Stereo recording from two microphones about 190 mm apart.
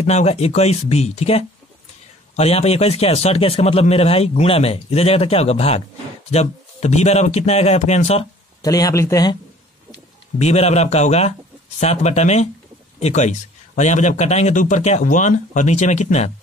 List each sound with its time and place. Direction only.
0.0 s a man's voice: 35° left (ahead or behind)
8.6 s speech: 20° left (ahead or behind)
10.4 s a man's voice: 35° left (ahead or behind)